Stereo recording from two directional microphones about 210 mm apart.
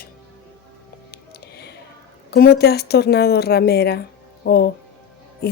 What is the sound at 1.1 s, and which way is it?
Music, 50° left (ahead or behind).